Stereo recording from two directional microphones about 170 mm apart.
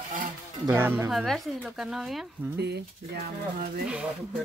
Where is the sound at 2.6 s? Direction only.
75° right (ahead or behind).